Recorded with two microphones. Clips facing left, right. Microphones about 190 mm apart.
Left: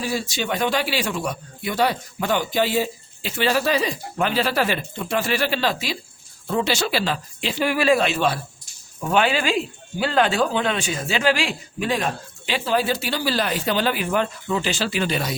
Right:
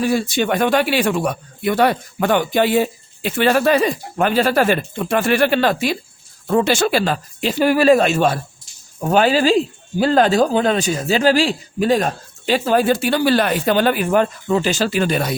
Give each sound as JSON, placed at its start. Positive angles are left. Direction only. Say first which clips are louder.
{"t": 0.0, "sound": "speech", "louder": "right 8 dB", "side_deg": -55}